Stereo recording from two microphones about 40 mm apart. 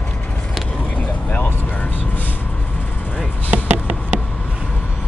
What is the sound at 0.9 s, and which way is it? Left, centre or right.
Vehicle, left.